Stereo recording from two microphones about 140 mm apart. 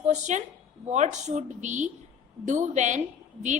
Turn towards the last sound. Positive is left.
turn(degrees=-60)  # may be behind; listen again after turning